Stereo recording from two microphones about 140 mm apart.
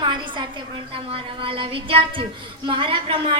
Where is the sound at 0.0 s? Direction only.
35° right (ahead or behind).